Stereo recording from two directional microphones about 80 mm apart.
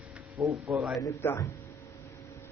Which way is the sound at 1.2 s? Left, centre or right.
Left.